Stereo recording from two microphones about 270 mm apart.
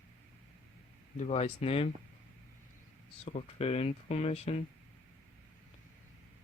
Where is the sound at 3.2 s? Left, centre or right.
Left.